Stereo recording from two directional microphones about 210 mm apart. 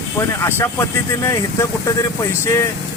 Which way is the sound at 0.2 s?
10° left (ahead or behind).